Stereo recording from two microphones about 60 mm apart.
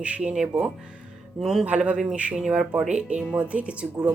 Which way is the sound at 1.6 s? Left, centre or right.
Right.